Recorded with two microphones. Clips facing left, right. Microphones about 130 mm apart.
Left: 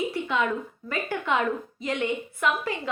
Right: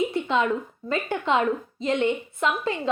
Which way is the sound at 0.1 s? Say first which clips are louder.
Right 3 dB; 25° right (ahead or behind).